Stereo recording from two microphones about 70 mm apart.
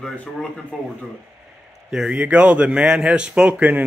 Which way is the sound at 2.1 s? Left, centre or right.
Centre.